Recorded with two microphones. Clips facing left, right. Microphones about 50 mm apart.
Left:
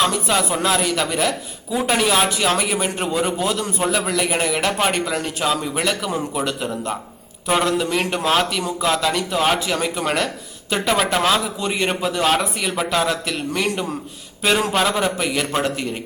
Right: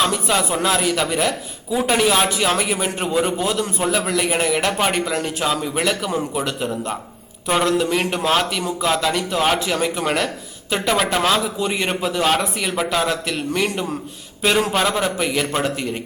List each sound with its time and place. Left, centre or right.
0.0 s speech: centre